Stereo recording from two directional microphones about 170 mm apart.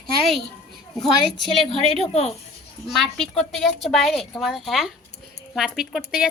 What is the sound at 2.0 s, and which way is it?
Speech, 40° left (ahead or behind).